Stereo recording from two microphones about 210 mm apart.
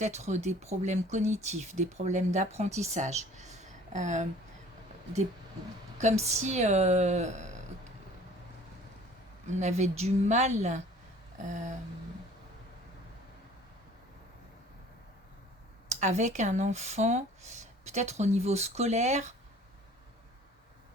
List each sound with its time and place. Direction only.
0.0 s speech: 35° right (ahead or behind)
6.0 s speech: 35° right (ahead or behind)
9.5 s speech: 35° right (ahead or behind)
15.9 s speech: 35° right (ahead or behind)